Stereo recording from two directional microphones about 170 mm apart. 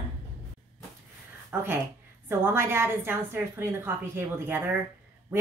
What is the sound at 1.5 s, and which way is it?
A woman's voice, 10° right (ahead or behind).